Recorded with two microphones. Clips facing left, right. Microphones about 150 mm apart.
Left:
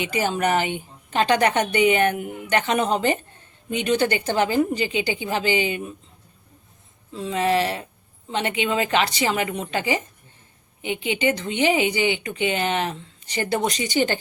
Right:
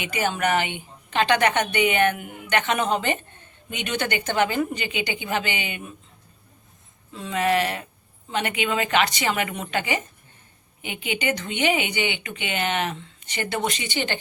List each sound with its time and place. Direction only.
0.0 s a woman's voice: 35° left (ahead or behind)
7.1 s a woman's voice: 30° left (ahead or behind)